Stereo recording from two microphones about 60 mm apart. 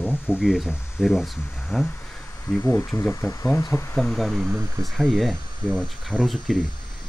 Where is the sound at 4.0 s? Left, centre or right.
Centre.